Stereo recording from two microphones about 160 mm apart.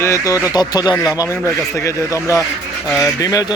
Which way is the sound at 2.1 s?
20° left (ahead or behind).